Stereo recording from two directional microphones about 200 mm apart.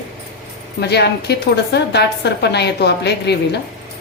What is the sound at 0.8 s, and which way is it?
A woman's voice, 55° left (ahead or behind).